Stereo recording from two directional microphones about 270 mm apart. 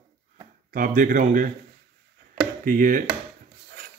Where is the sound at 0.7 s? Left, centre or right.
Right.